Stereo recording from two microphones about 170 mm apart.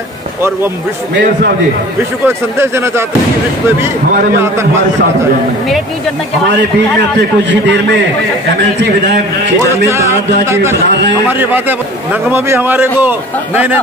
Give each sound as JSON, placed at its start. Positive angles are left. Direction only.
{"t": 2.2, "sound": "a man's voice", "side_deg": -15}
{"t": 9.8, "sound": "a man's voice", "side_deg": -15}